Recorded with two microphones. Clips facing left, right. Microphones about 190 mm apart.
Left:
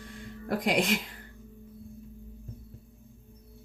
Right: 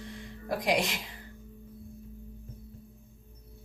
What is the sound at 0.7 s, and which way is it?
Speech, 55° left (ahead or behind).